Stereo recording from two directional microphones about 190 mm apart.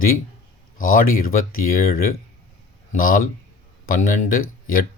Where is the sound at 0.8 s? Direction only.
45° left (ahead or behind).